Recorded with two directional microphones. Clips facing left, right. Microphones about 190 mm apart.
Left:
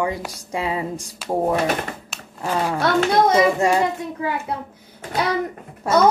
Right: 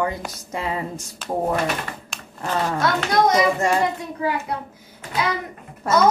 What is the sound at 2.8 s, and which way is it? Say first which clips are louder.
Speech: left 3 dB; 30° left (ahead or behind).